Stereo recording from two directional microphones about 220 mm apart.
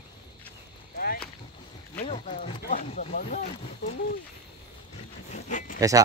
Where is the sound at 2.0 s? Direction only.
30° left (ahead or behind).